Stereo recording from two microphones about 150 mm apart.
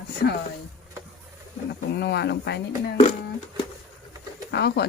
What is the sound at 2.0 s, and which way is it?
Speech, 90° left.